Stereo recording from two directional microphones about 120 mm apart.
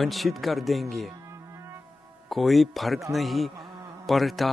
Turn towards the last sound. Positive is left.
turn(degrees=0)  # may be behind; listen again after turning